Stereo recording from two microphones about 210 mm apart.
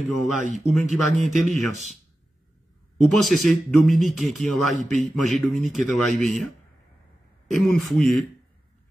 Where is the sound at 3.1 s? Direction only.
Centre (ahead or behind).